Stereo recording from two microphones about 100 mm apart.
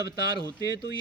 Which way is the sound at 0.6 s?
40° right (ahead or behind).